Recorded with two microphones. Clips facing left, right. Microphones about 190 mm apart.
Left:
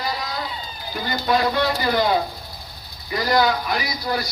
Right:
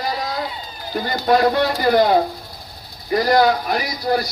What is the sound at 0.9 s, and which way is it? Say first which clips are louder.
A man's voice: right 4 dB; 45° right (ahead or behind).